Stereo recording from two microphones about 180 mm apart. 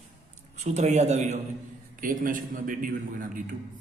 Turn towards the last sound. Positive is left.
turn(degrees=-50)  # may be behind; listen again after turning